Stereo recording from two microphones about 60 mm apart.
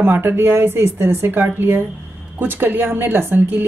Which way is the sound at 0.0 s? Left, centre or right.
Right.